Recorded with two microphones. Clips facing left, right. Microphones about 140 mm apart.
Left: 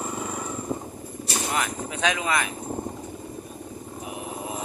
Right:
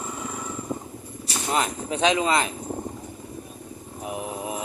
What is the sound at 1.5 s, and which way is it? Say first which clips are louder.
Speech: right 7 dB; 25° right (ahead or behind).